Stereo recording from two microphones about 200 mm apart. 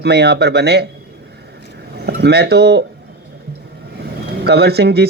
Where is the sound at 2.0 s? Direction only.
55° right (ahead or behind).